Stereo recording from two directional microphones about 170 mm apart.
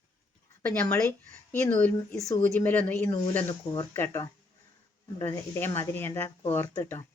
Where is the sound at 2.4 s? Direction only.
10° left (ahead or behind).